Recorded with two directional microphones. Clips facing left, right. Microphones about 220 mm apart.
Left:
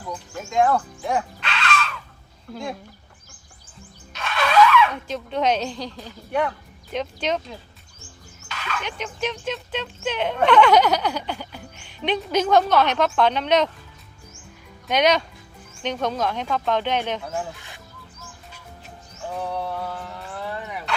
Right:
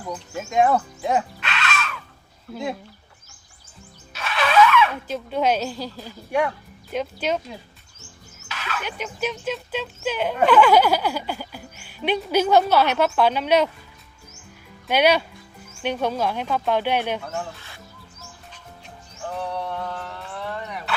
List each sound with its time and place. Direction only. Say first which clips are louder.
0.1 s speech: right 2 dB; 20° right (ahead or behind)
1.4 s a sound: left 2 dB; 5° right (ahead or behind)
4.1 s a woman's voice: even; 5° right (ahead or behind)
8.4 s speech: even; 5° right (ahead or behind)
14.8 s speech: right 1 dB; 5° right (ahead or behind)
19.5 s a sound: even; 5° left (ahead or behind)